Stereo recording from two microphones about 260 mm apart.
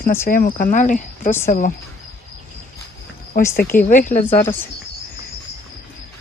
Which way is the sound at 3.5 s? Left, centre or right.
Left.